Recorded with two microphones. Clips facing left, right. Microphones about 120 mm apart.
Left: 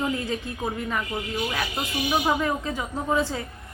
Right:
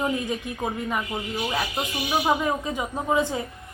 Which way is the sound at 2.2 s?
15° right (ahead or behind).